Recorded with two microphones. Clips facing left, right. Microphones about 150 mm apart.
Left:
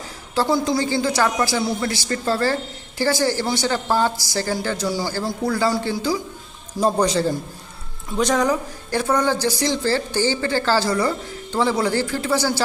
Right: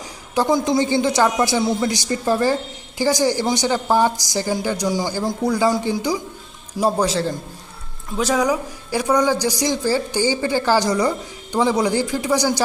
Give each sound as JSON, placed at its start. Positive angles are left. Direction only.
{"t": 0.3, "sound": "a man's voice", "side_deg": -20}
{"t": 6.7, "sound": "a man's voice", "side_deg": -5}